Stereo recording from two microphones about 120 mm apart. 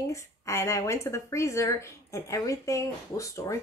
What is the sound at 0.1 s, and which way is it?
Speech, 25° left (ahead or behind).